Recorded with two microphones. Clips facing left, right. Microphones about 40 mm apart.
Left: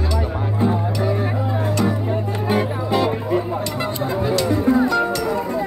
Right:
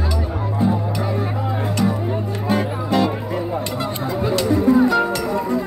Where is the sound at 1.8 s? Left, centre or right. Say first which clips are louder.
Even; centre.